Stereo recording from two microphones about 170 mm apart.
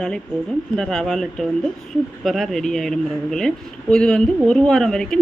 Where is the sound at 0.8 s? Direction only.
Centre (ahead or behind).